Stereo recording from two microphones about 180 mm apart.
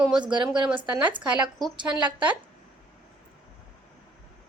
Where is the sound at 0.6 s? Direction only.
10° right (ahead or behind).